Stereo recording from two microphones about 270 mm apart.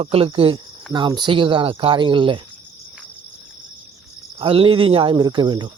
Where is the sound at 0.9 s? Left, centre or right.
Centre.